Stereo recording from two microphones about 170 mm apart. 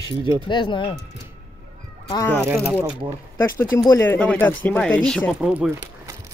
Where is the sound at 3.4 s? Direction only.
15° left (ahead or behind).